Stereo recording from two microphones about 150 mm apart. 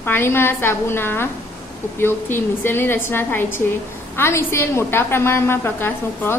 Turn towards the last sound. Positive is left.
turn(degrees=15)  # may be behind; listen again after turning